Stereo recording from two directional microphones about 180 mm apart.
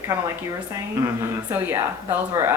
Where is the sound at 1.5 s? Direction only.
10° right (ahead or behind).